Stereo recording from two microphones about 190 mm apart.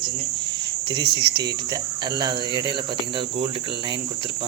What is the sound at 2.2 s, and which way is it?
Speech, 20° right (ahead or behind).